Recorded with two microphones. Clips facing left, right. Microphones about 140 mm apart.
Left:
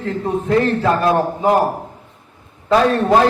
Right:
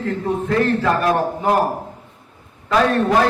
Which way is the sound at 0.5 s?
25° left (ahead or behind).